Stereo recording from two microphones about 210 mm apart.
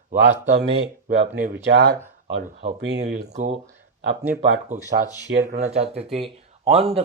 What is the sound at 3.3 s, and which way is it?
Speech, 30° right (ahead or behind).